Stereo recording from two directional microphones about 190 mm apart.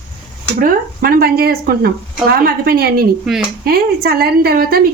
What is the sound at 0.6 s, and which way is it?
A woman's voice, 50° right (ahead or behind).